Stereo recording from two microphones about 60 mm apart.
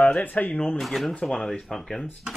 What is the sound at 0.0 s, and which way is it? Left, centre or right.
Speech, left.